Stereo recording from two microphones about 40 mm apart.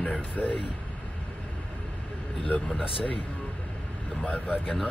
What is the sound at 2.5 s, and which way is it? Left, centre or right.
Speech, left.